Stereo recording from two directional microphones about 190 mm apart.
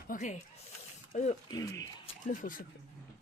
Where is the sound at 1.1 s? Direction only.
35° left (ahead or behind).